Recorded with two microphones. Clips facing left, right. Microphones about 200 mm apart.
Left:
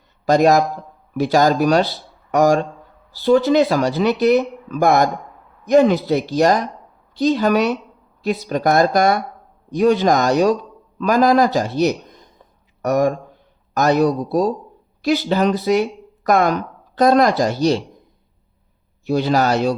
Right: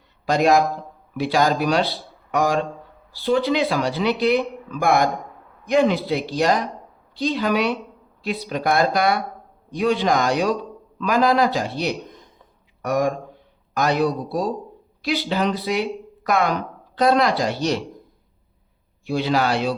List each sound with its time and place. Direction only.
0.3 s speech: 40° left (ahead or behind)
19.0 s speech: 45° left (ahead or behind)